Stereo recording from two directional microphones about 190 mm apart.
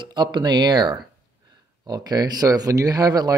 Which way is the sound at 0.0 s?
25° right (ahead or behind).